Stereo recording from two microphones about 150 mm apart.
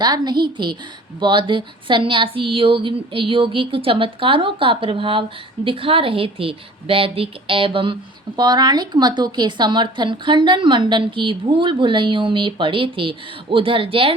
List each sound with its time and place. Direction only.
0.0 s a woman's voice: 30° right (ahead or behind)